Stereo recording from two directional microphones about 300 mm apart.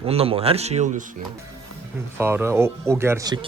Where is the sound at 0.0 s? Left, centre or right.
Centre.